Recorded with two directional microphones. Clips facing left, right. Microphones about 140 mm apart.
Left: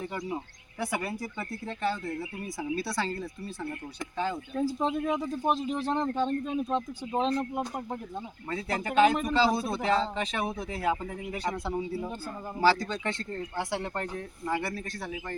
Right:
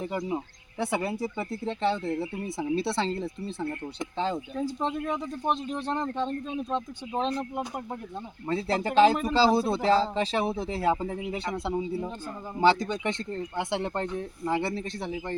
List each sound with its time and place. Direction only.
0.0 s speech: 20° right (ahead or behind)
4.5 s speech: centre (ahead or behind)
8.4 s speech: 30° right (ahead or behind)